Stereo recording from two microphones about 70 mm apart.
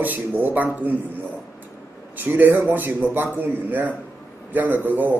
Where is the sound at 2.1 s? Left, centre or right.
Right.